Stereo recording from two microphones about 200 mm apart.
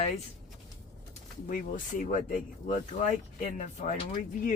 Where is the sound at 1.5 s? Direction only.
40° left (ahead or behind).